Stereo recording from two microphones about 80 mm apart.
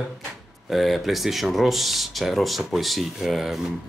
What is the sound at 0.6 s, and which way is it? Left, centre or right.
Speech, centre.